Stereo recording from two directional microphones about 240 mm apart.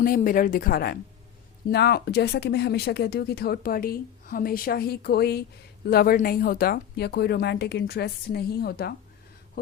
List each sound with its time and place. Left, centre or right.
0.0 s speech: left